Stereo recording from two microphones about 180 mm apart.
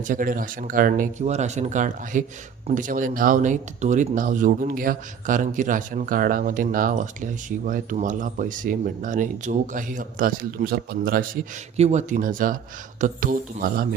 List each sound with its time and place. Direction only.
0.1 s speech: 50° right (ahead or behind)
11.8 s speech: 40° right (ahead or behind)